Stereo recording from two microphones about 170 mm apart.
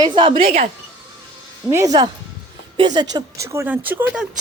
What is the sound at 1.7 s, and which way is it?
Speech, 20° right (ahead or behind).